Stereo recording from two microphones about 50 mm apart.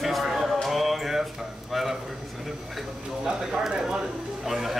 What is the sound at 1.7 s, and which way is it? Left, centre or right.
Speech, centre.